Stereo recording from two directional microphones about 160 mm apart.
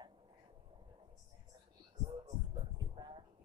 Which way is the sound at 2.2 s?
25° right (ahead or behind).